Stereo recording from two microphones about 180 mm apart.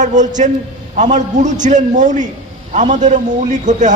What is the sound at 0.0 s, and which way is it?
A man's voice, 45° right (ahead or behind).